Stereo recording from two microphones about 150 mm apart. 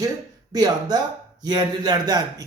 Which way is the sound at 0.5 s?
25° right (ahead or behind).